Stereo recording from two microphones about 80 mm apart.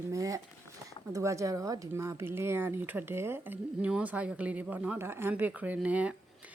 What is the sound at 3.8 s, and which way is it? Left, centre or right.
Speech, centre.